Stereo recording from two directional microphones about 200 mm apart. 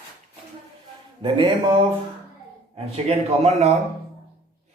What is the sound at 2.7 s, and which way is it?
Speech, 30° right (ahead or behind).